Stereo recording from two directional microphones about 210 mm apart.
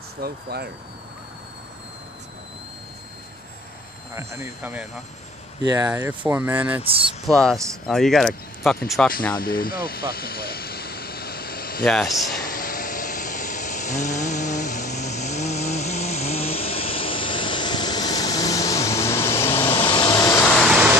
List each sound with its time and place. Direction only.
0.2 s speech: 50° right (ahead or behind)
4.1 s speech: 15° right (ahead or behind)
5.9 s speech: 10° right (ahead or behind)
6.8 s speech: 25° right (ahead or behind)
7.2 s speech: 5° left (ahead or behind)
9.4 s vehicle: 45° left (ahead or behind)
11.8 s speech: centre (ahead or behind)
12.4 s a sound: 45° left (ahead or behind); by 20.9 s centre (ahead or behind)